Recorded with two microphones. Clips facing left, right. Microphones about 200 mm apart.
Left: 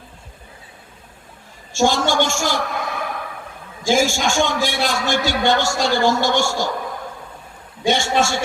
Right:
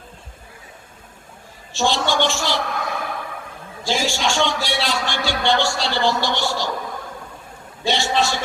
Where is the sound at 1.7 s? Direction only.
45° left (ahead or behind).